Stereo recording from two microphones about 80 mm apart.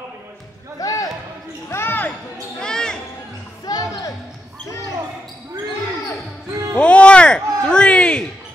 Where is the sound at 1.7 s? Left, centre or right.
Left.